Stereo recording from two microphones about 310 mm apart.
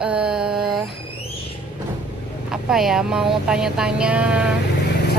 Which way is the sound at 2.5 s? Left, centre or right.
Centre.